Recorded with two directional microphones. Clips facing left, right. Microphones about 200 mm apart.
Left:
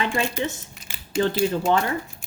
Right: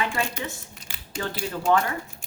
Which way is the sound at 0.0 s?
25° left (ahead or behind).